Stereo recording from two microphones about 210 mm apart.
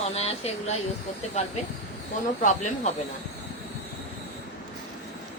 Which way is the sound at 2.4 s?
35° left (ahead or behind).